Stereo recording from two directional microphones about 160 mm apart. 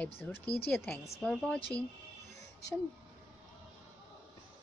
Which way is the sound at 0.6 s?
10° left (ahead or behind).